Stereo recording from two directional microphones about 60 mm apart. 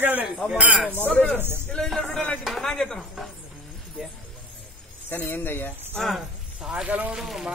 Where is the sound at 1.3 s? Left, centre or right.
Right.